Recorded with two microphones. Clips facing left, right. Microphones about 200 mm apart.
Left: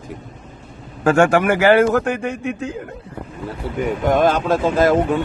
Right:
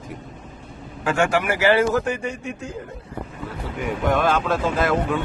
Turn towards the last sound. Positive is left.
turn(degrees=35)  # may be behind; listen again after turning